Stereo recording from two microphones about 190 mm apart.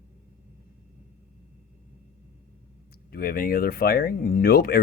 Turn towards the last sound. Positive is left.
turn(degrees=50)  # may be behind; listen again after turning